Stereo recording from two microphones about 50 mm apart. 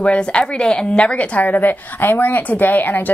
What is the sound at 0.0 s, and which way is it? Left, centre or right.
A woman's voice, left.